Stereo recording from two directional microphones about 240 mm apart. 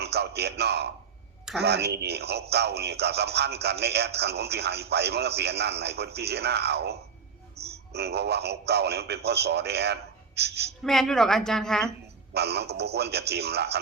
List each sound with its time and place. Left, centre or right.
0.0 s a man's voice: right
7.6 s a sound: right
7.9 s speech: right
10.8 s a woman's voice: centre
12.3 s speech: right